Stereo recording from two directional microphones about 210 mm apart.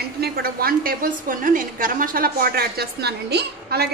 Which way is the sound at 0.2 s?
45° right (ahead or behind).